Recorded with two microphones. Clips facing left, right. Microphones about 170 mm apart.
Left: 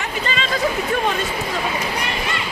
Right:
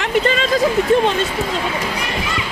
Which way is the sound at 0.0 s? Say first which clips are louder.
Right 8 dB; 60° right (ahead or behind).